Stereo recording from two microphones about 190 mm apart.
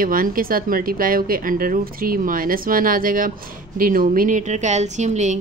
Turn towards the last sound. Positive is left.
turn(degrees=-40)  # may be behind; listen again after turning